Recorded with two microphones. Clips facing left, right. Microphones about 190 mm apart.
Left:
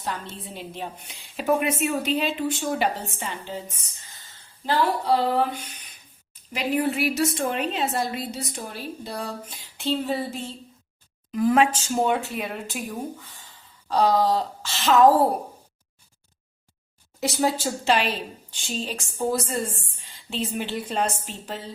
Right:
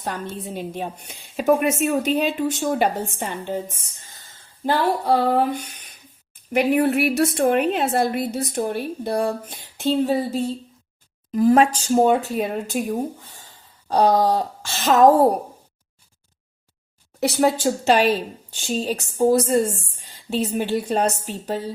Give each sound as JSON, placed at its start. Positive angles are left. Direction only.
{"t": 0.4, "sound": "a woman's voice", "side_deg": -45}
{"t": 6.5, "sound": "a woman's voice", "side_deg": -60}
{"t": 17.2, "sound": "a woman's voice", "side_deg": -65}
{"t": 17.8, "sound": "a woman's voice", "side_deg": -45}